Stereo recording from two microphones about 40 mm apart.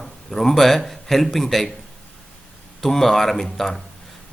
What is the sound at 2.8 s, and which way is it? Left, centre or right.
Speech, centre.